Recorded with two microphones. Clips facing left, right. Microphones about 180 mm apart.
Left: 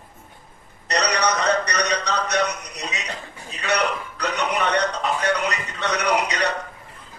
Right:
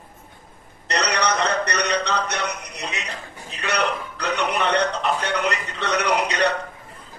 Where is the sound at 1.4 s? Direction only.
60° right (ahead or behind).